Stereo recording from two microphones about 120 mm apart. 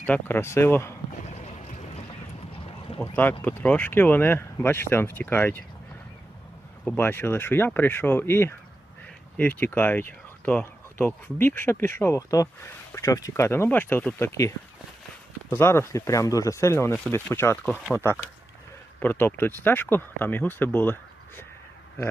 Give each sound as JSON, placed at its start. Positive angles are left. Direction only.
{"t": 0.0, "sound": "speech", "side_deg": 15}
{"t": 1.3, "sound": "boat", "side_deg": 70}
{"t": 3.0, "sound": "speech", "side_deg": 15}
{"t": 6.8, "sound": "speech", "side_deg": 20}
{"t": 14.2, "sound": "speech", "side_deg": 25}
{"t": 15.5, "sound": "speech", "side_deg": 20}
{"t": 18.9, "sound": "speech", "side_deg": 15}